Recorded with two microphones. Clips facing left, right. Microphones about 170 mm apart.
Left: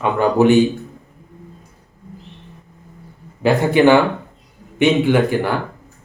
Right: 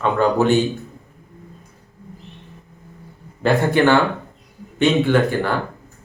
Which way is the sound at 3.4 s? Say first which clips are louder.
Left 3 dB; 15° left (ahead or behind).